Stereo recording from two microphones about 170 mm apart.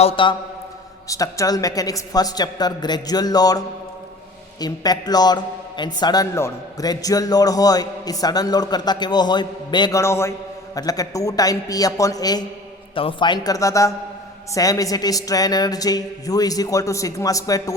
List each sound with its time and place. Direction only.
0.0 s a man's voice: 30° left (ahead or behind)
1.0 s a man's voice: 20° left (ahead or behind)
4.6 s a man's voice: 25° left (ahead or behind)